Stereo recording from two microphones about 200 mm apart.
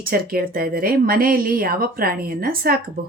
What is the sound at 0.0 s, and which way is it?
Mantra, 45° right (ahead or behind).